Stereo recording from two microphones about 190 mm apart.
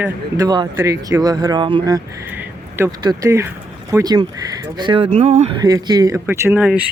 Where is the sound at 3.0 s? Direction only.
20° right (ahead or behind).